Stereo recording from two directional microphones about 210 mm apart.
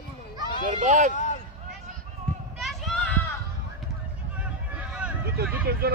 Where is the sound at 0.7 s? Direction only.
35° right (ahead or behind).